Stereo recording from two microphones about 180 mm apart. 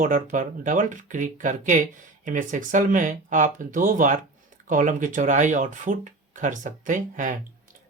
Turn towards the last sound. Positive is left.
turn(degrees=-45)  # may be behind; listen again after turning